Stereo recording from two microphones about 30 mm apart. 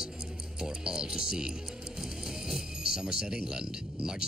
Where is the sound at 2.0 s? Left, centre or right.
Centre.